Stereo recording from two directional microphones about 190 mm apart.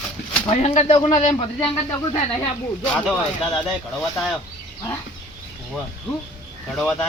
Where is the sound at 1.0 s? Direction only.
40° left (ahead or behind).